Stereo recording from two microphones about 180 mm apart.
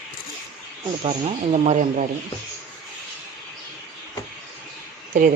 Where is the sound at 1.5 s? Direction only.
40° right (ahead or behind).